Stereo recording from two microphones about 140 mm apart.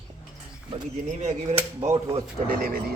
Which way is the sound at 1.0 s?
55° right (ahead or behind).